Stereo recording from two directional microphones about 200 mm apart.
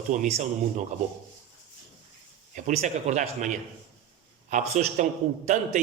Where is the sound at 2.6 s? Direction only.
35° right (ahead or behind).